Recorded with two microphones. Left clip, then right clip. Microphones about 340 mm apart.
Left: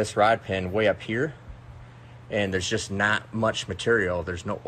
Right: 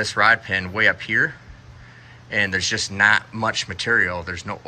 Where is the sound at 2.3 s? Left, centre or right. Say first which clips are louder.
Right 5 dB; centre.